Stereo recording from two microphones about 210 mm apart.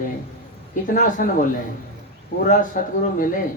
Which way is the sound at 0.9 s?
40° left (ahead or behind).